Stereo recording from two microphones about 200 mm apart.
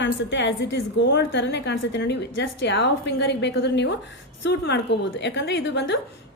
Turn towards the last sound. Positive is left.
turn(degrees=60)  # may be behind; listen again after turning